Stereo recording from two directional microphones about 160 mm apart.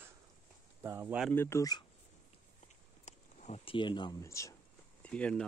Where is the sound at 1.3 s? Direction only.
15° left (ahead or behind).